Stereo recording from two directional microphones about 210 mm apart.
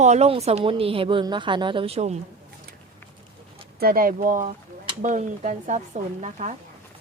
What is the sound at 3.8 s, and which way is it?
Speech, 45° right (ahead or behind).